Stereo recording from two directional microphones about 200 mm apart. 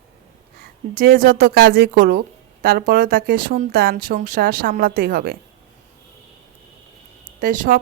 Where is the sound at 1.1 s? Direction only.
45° right (ahead or behind).